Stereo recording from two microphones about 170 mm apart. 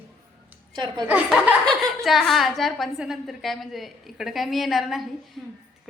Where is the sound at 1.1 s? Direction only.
10° right (ahead or behind).